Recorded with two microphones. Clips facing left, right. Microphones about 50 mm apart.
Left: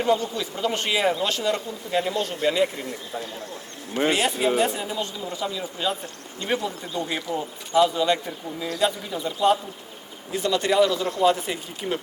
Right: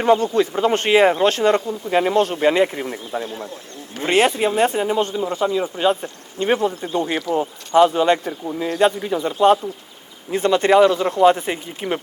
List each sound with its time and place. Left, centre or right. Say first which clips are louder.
0.0 s speech: right 7 dB; right
10.3 s speech: right 7 dB; right